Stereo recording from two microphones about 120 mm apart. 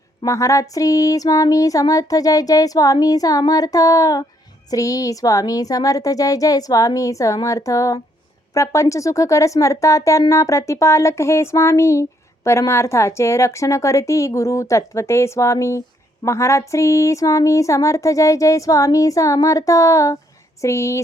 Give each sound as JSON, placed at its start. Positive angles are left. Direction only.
{"t": 0.3, "sound": "speech", "side_deg": 25}